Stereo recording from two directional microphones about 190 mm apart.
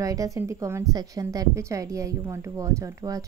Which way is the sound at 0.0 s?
15° right (ahead or behind).